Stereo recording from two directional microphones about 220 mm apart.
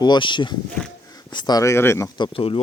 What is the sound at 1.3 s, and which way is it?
Speech, 20° left (ahead or behind).